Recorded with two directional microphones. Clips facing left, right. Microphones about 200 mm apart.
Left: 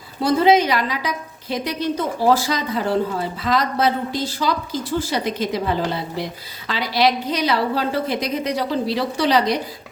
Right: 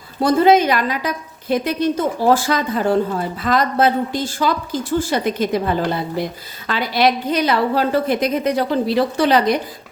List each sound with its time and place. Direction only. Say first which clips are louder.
0.2 s a woman's voice: right 2 dB; 50° right (ahead or behind)